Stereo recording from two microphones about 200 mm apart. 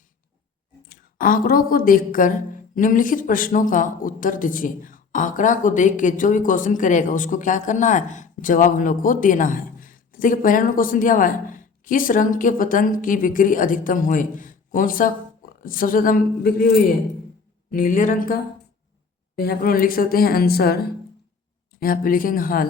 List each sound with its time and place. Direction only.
0.9 s a woman's voice: 45° left (ahead or behind)
17.7 s a woman's voice: 45° left (ahead or behind)
19.4 s a woman's voice: 50° left (ahead or behind)
21.8 s a woman's voice: 45° left (ahead or behind)